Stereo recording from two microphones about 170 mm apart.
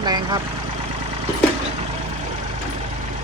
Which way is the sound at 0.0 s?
25° right (ahead or behind).